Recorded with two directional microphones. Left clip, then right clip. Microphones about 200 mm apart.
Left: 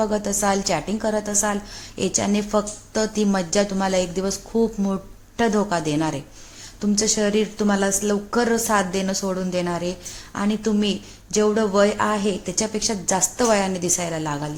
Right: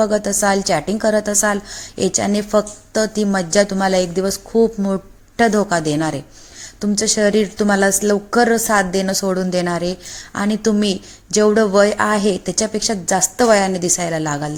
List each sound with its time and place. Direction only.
0.0 s a woman's voice: 20° right (ahead or behind)